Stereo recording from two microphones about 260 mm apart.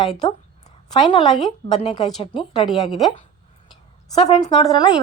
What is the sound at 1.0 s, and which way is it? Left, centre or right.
A woman's voice, centre.